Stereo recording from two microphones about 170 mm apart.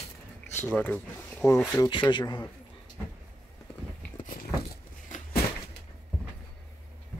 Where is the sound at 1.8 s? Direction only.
25° left (ahead or behind).